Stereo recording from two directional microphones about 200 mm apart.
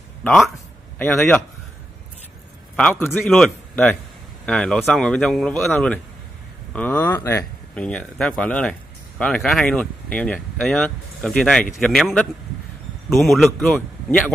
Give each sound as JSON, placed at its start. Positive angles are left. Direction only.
{"t": 0.2, "sound": "speech", "side_deg": 0}
{"t": 2.7, "sound": "speech", "side_deg": 10}